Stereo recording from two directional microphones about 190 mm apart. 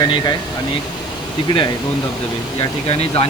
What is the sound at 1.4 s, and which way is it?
Speech, 25° left (ahead or behind).